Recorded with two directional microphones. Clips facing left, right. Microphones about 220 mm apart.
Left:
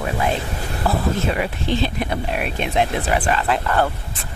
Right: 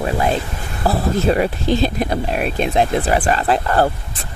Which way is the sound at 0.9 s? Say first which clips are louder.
Right 4 dB; 35° right (ahead or behind).